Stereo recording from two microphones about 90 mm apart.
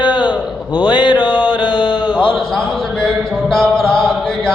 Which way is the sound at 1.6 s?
65° left (ahead or behind).